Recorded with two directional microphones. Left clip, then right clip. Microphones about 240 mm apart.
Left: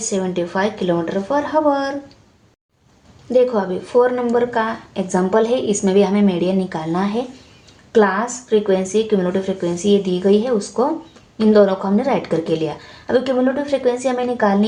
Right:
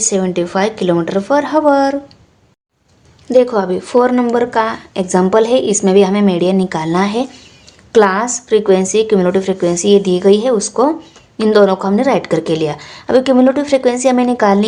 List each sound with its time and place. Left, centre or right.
0.0 s a woman's voice: right
3.2 s a woman's voice: right